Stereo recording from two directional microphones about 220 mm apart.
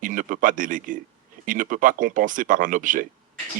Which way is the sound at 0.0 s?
35° right (ahead or behind).